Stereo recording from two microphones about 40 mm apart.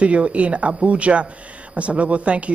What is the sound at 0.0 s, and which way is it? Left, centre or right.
A man's voice, right.